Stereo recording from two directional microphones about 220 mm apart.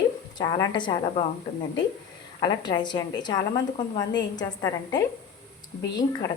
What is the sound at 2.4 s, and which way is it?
A woman's voice, 20° left (ahead or behind).